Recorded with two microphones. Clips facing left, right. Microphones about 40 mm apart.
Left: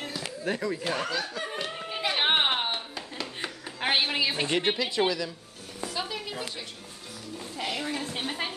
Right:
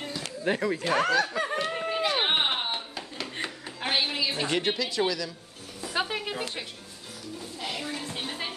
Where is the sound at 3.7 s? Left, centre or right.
Left.